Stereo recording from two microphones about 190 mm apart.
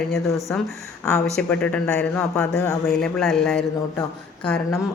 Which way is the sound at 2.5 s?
15° left (ahead or behind).